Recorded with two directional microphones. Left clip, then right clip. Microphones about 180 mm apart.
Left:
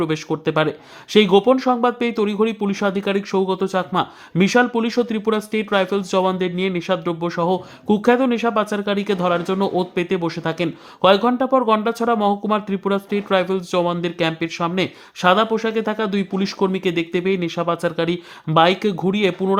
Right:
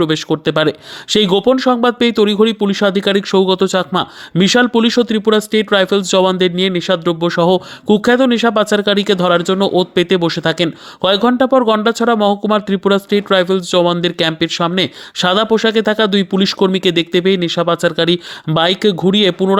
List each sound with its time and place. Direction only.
0.0 s speech: 25° right (ahead or behind)